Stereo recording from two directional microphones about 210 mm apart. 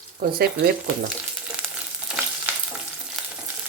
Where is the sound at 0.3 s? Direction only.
50° right (ahead or behind).